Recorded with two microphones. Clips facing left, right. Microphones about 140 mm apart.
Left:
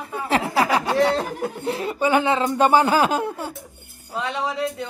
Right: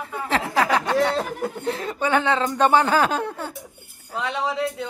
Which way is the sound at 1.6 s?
10° left (ahead or behind).